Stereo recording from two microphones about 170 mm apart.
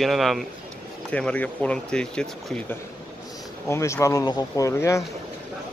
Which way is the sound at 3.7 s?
15° left (ahead or behind).